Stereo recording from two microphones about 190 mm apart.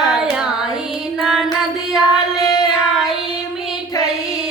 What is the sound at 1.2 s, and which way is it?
Music, centre (ahead or behind).